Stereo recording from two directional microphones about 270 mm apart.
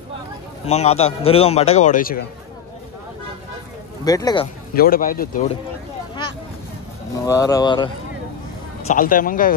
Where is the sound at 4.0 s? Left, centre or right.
Centre.